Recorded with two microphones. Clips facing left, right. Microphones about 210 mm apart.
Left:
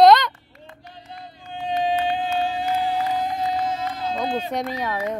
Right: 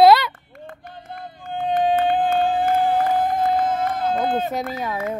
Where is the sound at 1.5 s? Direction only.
55° right (ahead or behind).